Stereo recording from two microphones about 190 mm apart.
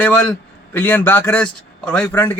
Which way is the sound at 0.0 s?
10° left (ahead or behind).